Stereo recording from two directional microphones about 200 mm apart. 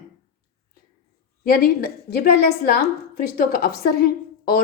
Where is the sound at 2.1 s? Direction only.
55° left (ahead or behind).